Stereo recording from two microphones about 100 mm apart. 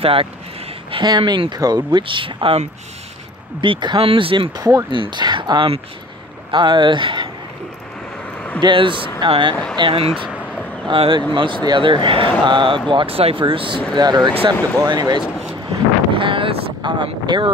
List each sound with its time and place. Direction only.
0.0 s speech: 70° right (ahead or behind)
0.9 s speech: 45° right (ahead or behind); by 2.7 s 75° right (ahead or behind)
3.6 s speech: 55° right (ahead or behind)
4.6 s speech: 40° right (ahead or behind)
4.9 s speech: 50° right (ahead or behind)
8.5 s speech: 55° right (ahead or behind)
12.9 s speech: 70° right (ahead or behind)
13.9 s speech: 45° right (ahead or behind)
16.1 s speech: 60° right (ahead or behind)